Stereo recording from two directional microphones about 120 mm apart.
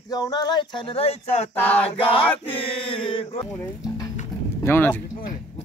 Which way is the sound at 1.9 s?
45° left (ahead or behind).